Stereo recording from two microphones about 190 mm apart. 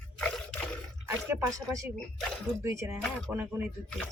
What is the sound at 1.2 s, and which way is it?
Speech, 15° right (ahead or behind).